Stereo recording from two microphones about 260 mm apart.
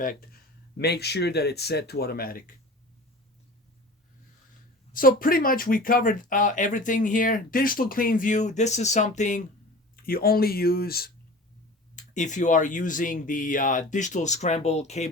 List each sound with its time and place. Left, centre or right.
0.0 s speech: left
4.9 s speech: left